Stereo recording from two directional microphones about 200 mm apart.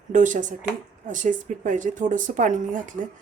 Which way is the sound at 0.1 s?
40° right (ahead or behind).